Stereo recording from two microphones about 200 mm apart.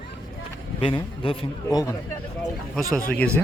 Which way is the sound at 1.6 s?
15° left (ahead or behind).